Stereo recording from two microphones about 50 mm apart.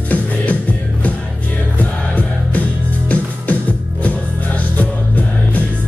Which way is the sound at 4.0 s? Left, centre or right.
Left.